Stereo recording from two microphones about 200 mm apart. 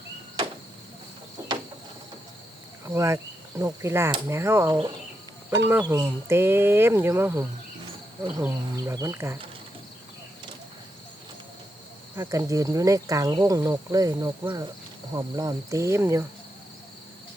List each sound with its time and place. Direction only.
2.8 s speech: 15° right (ahead or behind)
12.1 s speech: 15° right (ahead or behind)